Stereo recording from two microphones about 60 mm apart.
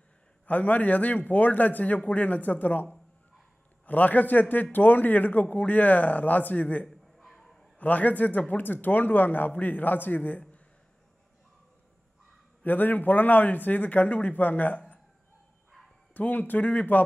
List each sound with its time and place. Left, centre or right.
0.5 s speech: left
6.9 s a sound: centre
7.8 s speech: left
12.6 s speech: left
16.1 s speech: left